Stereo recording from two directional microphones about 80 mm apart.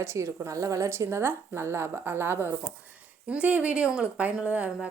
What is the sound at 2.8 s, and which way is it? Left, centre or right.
A woman's voice, centre.